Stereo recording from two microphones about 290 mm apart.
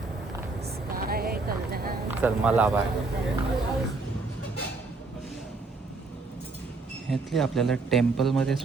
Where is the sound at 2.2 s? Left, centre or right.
Centre.